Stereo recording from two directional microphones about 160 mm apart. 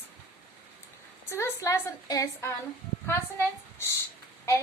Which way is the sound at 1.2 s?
15° left (ahead or behind).